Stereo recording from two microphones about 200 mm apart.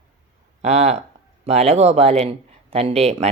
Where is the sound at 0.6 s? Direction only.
35° right (ahead or behind).